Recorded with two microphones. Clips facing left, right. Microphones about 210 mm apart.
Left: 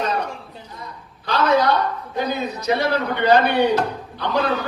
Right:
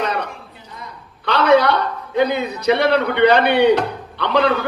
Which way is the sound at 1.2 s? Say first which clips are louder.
Right 4 dB; 65° right (ahead or behind).